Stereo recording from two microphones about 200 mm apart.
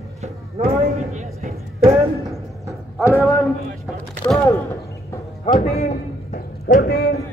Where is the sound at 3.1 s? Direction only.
10° left (ahead or behind).